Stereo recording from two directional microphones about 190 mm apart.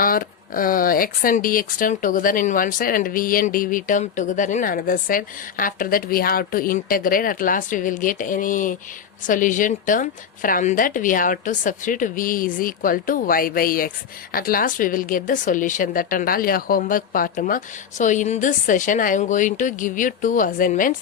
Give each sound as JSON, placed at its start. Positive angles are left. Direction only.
{"t": 0.0, "sound": "speech", "side_deg": 45}